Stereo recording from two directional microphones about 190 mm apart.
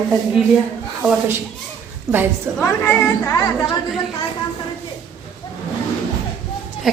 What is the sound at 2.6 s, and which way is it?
Speech, 10° left (ahead or behind).